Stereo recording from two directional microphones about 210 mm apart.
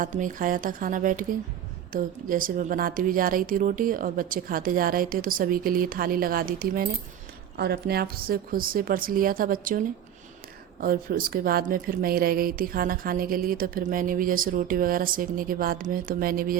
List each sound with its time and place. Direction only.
0.0 s speech: 40° right (ahead or behind)